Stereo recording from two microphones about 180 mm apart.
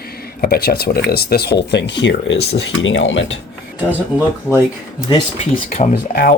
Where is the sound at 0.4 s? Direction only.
60° left (ahead or behind); by 3.3 s 90° left.